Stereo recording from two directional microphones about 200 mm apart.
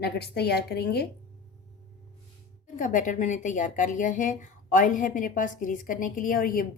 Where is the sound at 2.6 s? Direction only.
40° left (ahead or behind).